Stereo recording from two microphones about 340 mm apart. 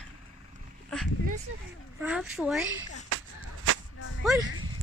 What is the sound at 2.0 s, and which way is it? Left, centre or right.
Speech, centre.